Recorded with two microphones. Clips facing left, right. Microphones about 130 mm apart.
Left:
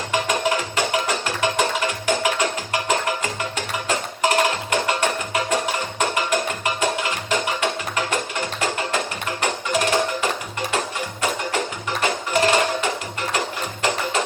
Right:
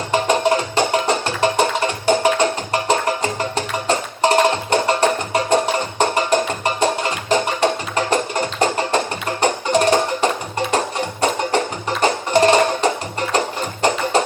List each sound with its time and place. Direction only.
0.1 s music: 35° right (ahead or behind)